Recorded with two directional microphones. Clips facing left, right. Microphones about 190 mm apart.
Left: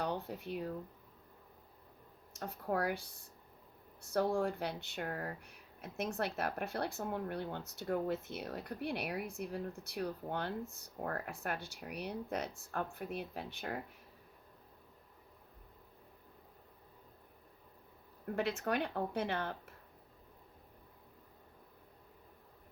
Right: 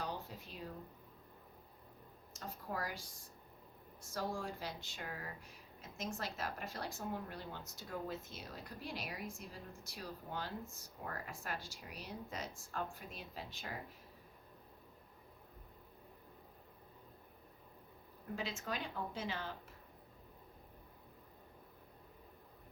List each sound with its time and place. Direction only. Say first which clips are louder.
0.0 s a sound: left 6 dB; 60° left (ahead or behind)
2.3 s speech: left 7 dB; 60° left (ahead or behind)
18.3 s speech: left 8 dB; 60° left (ahead or behind)